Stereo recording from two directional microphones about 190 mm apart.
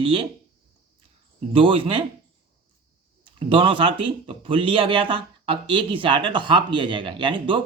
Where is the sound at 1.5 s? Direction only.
25° right (ahead or behind).